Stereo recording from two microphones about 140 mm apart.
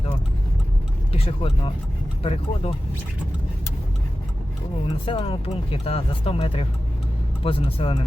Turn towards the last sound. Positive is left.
turn(degrees=40)  # may be behind; listen again after turning